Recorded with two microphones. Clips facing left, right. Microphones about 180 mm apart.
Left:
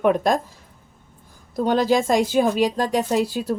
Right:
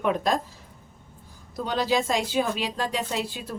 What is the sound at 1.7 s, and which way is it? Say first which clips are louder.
A woman's voice: left 6 dB; 50° left (ahead or behind).